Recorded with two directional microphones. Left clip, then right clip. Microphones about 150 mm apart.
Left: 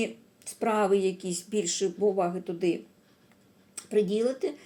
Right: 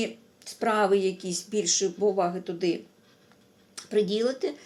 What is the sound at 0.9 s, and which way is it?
Speech, 35° right (ahead or behind).